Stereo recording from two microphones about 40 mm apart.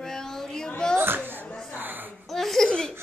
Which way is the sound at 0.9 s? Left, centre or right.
Right.